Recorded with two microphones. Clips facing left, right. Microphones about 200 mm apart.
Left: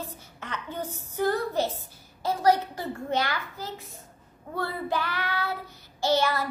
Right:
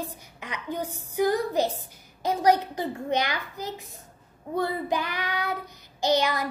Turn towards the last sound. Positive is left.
turn(degrees=-15)  # may be behind; listen again after turning